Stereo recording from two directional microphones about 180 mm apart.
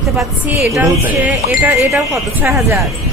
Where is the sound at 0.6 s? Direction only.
15° right (ahead or behind).